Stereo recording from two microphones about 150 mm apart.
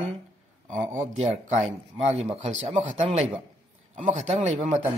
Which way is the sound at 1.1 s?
45° right (ahead or behind).